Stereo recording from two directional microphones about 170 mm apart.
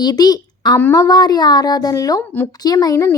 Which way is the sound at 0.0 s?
25° left (ahead or behind).